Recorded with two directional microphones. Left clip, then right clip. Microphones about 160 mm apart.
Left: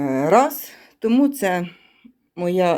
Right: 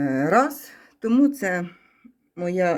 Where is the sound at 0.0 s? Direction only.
Centre (ahead or behind).